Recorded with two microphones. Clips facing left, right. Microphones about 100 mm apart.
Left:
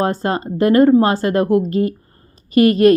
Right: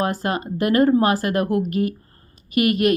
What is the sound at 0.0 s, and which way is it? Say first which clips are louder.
A woman's voice: left 4 dB; 30° left (ahead or behind).